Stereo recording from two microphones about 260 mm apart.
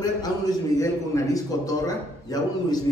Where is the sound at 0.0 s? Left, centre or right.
Centre.